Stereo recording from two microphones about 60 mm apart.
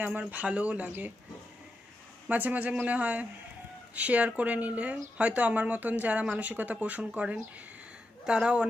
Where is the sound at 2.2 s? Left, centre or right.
Right.